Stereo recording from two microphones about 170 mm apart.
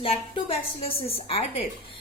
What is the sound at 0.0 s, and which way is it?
A woman's voice, 35° left (ahead or behind).